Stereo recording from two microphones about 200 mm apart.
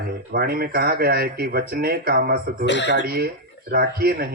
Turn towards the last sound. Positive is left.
turn(degrees=-50)  # may be behind; listen again after turning